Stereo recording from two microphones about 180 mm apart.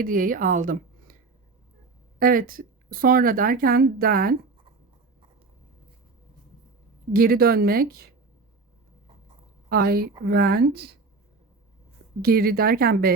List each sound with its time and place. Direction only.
0.0 s a woman's voice: 50° right (ahead or behind)
2.1 s speech: 50° right (ahead or behind)
7.1 s speech: 55° right (ahead or behind)
9.6 s a woman's voice: 60° right (ahead or behind)
12.2 s speech: 55° right (ahead or behind)